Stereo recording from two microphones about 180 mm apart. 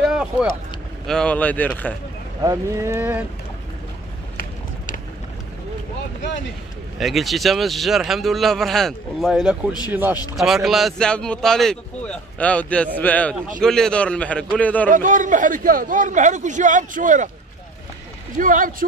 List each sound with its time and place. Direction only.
0.0 s vehicle: 5° right (ahead or behind)
1.0 s a man's voice: 5° left (ahead or behind)
2.4 s speech: 15° right (ahead or behind)
4.4 s a sound: 50° left (ahead or behind)
7.0 s a man's voice: centre (ahead or behind)
14.9 s a man's voice: 45° right (ahead or behind)
18.4 s a man's voice: 50° right (ahead or behind)